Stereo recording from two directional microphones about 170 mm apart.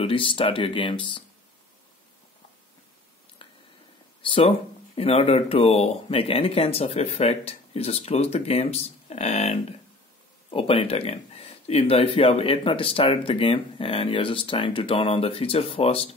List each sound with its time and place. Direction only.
0.0 s speech: 30° left (ahead or behind)
3.4 s squish: 30° left (ahead or behind)
4.2 s speech: 30° left (ahead or behind)